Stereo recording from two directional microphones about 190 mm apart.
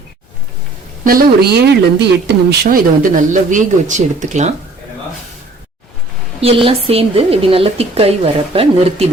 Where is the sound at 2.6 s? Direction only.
45° right (ahead or behind).